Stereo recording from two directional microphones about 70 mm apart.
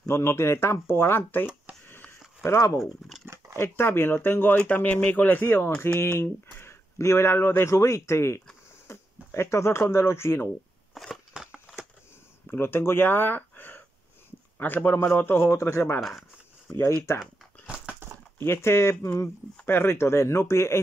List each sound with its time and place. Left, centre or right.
0.1 s speech: left
1.9 s a sound: left
2.5 s speech: left
3.5 s speech: left
10.9 s crushing: centre
11.4 s a sound: centre
12.4 s speech: left
15.5 s speech: left
16.0 s speech: centre
18.0 s a sound: right
18.4 s speech: left